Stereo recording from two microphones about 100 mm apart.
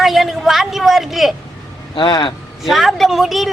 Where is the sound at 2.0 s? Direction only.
50° left (ahead or behind).